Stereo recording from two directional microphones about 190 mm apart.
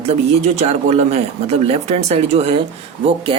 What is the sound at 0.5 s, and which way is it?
Speech, 35° right (ahead or behind).